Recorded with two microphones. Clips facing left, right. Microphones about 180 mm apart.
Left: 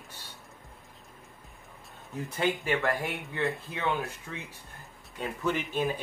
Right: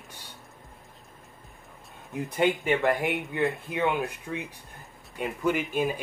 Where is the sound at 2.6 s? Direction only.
20° right (ahead or behind).